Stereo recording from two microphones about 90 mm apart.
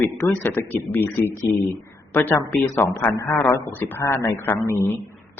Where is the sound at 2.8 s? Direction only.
20° left (ahead or behind).